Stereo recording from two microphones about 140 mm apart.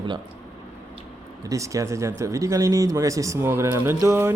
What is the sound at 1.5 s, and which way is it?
Speech, 25° right (ahead or behind).